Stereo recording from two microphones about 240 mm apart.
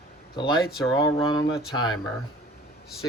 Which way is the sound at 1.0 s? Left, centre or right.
Centre.